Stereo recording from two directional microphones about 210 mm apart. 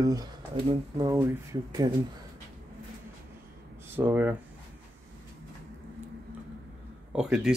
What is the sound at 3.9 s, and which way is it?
Speech, 10° right (ahead or behind).